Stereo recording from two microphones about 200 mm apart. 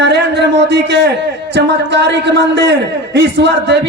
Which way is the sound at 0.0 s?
60° right (ahead or behind).